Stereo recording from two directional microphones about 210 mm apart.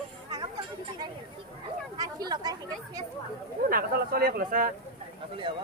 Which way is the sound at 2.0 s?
20° right (ahead or behind).